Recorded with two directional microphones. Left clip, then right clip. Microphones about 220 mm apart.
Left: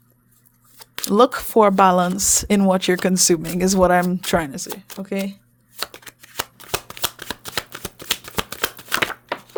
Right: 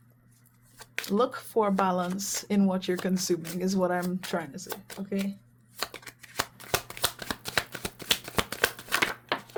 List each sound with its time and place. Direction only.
1.0 s speech: 50° left (ahead or behind)
4.7 s speech: 25° left (ahead or behind)
5.7 s shuffling cards: 30° left (ahead or behind)